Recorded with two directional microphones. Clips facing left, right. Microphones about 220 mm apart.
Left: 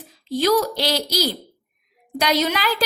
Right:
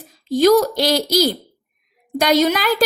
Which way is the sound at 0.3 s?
45° right (ahead or behind).